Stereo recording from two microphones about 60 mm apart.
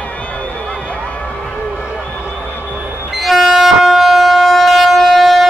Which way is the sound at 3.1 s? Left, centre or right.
Centre.